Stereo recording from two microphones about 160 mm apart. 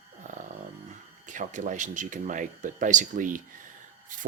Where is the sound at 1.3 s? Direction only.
50° right (ahead or behind).